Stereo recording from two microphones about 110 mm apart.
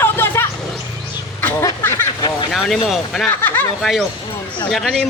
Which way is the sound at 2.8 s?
Centre (ahead or behind).